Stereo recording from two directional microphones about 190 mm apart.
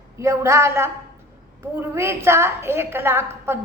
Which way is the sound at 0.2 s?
15° right (ahead or behind).